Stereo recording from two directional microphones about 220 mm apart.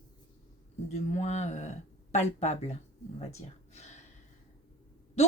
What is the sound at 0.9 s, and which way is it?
Speech, 30° left (ahead or behind).